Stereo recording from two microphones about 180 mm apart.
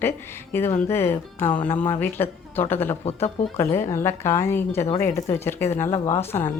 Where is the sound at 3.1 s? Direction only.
35° left (ahead or behind).